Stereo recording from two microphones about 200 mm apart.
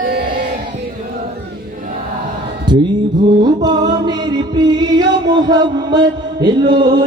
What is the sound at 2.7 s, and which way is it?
Music, 25° right (ahead or behind).